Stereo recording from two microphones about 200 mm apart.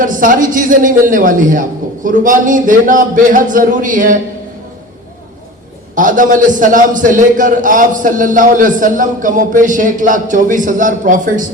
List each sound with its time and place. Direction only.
0.0 s a man's voice: 40° right (ahead or behind)
5.9 s a man's voice: 40° right (ahead or behind)